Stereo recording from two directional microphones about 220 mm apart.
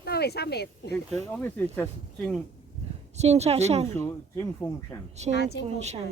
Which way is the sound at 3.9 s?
10° left (ahead or behind).